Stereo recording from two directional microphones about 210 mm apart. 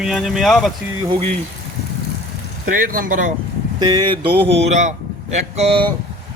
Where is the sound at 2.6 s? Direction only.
40° right (ahead or behind).